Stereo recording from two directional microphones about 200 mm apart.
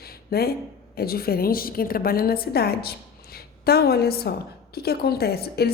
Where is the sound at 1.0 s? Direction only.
50° left (ahead or behind).